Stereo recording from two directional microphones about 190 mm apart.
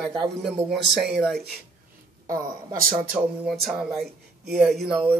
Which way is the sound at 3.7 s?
Centre (ahead or behind).